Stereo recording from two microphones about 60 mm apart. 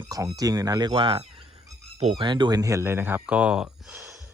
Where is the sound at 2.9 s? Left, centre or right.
Right.